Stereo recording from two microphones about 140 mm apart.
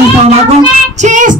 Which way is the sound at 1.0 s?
65° right (ahead or behind).